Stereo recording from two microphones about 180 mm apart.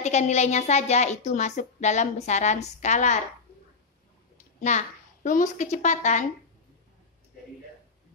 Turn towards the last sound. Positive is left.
turn(degrees=40)  # may be behind; listen again after turning